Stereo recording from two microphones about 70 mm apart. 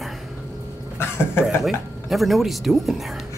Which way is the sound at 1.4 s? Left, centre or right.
Centre.